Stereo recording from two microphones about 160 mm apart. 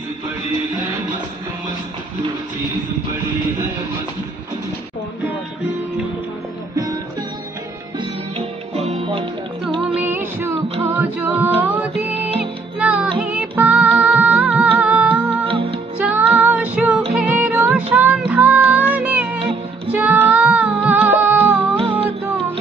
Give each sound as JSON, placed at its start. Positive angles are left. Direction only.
{"t": 6.7, "sound": "music", "side_deg": -20}
{"t": 8.0, "sound": "music", "side_deg": -40}
{"t": 9.9, "sound": "music", "side_deg": -15}
{"t": 15.4, "sound": "music", "side_deg": -35}
{"t": 16.0, "sound": "music", "side_deg": -10}
{"t": 21.7, "sound": "music", "side_deg": -35}